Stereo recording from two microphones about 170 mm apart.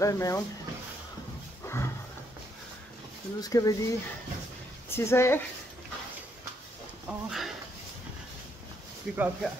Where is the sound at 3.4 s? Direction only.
20° left (ahead or behind).